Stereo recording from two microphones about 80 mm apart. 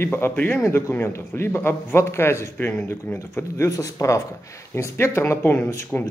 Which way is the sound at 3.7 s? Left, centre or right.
Left.